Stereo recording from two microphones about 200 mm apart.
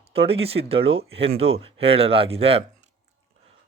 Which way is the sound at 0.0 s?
30° right (ahead or behind).